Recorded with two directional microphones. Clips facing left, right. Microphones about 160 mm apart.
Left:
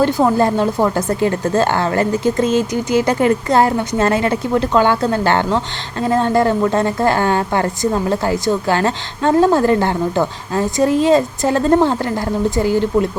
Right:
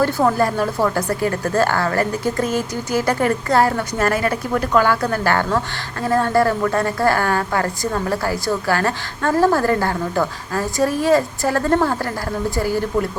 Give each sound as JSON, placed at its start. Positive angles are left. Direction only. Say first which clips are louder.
{"t": 0.0, "sound": "speech", "louder": "left 3 dB", "side_deg": 20}